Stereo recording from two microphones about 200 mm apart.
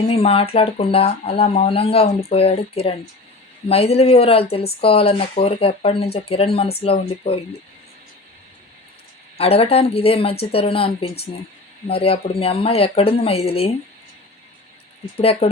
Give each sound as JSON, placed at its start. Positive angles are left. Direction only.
{"t": 0.1, "sound": "speech", "side_deg": 30}
{"t": 9.4, "sound": "speech", "side_deg": 30}
{"t": 15.2, "sound": "speech", "side_deg": 30}